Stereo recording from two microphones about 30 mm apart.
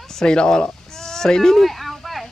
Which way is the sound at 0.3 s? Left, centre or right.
Left.